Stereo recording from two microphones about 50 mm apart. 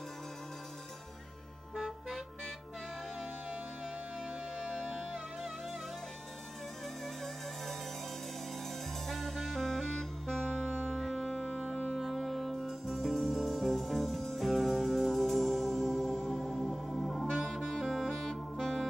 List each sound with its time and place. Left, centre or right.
1.8 s music: centre
4.6 s music: right
9.0 s saxophone: centre
11.0 s music: centre
11.2 s music: centre
12.0 s music: centre
17.3 s saxophone: centre